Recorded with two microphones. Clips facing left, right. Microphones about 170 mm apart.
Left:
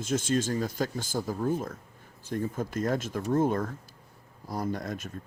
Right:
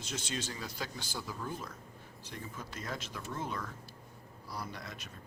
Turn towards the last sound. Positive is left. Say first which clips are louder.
# left 12 dB
turn(degrees=50)  # may be behind; listen again after turning